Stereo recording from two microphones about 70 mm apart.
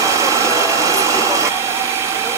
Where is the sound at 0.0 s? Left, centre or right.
Right.